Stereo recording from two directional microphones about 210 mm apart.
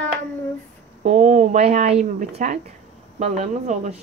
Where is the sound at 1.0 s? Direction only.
35° right (ahead or behind).